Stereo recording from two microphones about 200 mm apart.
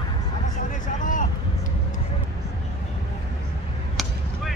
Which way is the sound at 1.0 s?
40° left (ahead or behind).